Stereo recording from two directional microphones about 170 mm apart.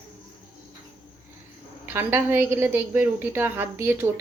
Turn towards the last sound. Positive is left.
turn(degrees=-10)  # may be behind; listen again after turning